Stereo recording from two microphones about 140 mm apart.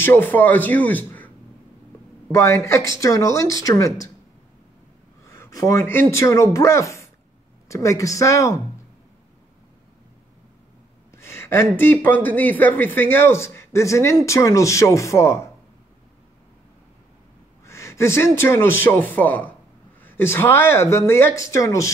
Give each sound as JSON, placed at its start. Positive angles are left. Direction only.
{"t": 0.0, "sound": "speech", "side_deg": 15}
{"t": 2.3, "sound": "speech", "side_deg": 20}
{"t": 5.2, "sound": "speech", "side_deg": 20}
{"t": 11.1, "sound": "a sound", "side_deg": 20}
{"t": 11.8, "sound": "speech", "side_deg": 15}
{"t": 17.6, "sound": "speech", "side_deg": 20}